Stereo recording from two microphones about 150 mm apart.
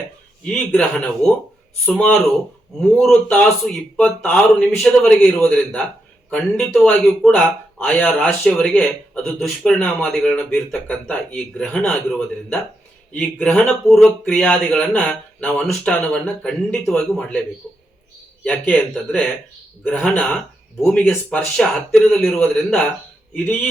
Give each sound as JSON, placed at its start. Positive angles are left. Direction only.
{"t": 0.4, "sound": "a man's voice", "side_deg": 5}
{"t": 13.1, "sound": "a man's voice", "side_deg": 5}
{"t": 18.4, "sound": "a man's voice", "side_deg": 10}